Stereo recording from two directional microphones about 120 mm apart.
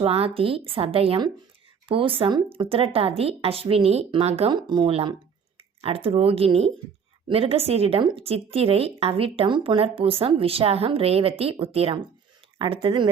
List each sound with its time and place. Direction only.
0.0 s speech: 50° right (ahead or behind)
4.5 s speech: 40° right (ahead or behind)